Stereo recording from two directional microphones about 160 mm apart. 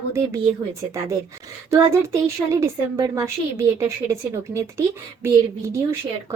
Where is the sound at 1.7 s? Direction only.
20° right (ahead or behind).